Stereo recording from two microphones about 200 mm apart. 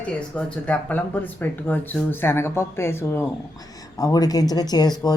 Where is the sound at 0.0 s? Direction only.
5° left (ahead or behind).